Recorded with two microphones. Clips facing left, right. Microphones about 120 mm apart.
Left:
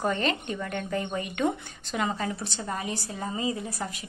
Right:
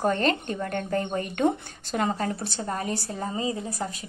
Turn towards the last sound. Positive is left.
turn(degrees=-30)  # may be behind; listen again after turning